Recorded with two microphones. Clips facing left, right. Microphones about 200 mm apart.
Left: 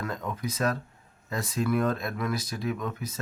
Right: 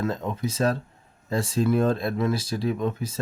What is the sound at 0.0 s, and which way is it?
Speech, 25° right (ahead or behind).